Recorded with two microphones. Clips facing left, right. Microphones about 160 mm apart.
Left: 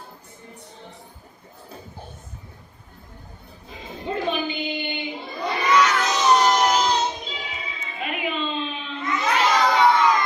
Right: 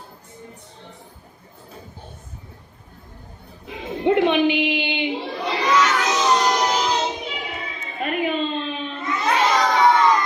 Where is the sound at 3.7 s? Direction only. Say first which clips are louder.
Right 10 dB; 70° right (ahead or behind).